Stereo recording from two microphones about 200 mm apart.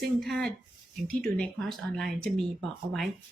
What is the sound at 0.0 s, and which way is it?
Speech, centre (ahead or behind).